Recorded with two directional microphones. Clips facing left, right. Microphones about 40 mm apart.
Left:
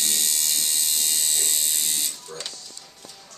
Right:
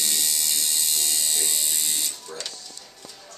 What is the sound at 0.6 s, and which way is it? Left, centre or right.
Electric shaver, left.